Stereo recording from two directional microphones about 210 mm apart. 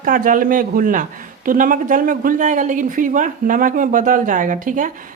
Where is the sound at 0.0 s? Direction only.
40° right (ahead or behind).